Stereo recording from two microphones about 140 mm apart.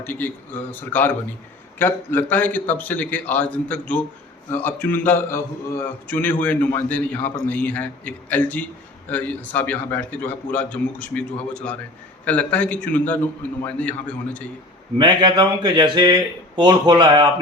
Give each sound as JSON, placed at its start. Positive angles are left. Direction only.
{"t": 0.0, "sound": "a man's voice", "side_deg": 15}
{"t": 14.9, "sound": "speech", "side_deg": -35}